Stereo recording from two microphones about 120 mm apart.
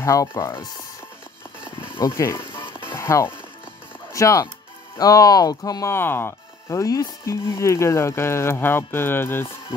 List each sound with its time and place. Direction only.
0.0 s speech: 25° left (ahead or behind)
2.0 s speech: 25° left (ahead or behind)